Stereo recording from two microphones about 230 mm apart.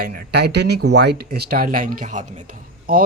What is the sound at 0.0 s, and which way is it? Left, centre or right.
Speech, right.